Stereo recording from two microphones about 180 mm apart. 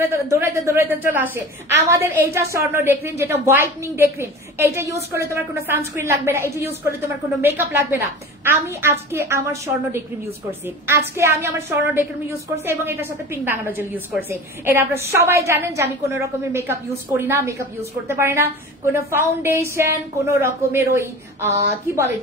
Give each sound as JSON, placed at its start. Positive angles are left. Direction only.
{"t": 0.1, "sound": "a woman's voice", "side_deg": -15}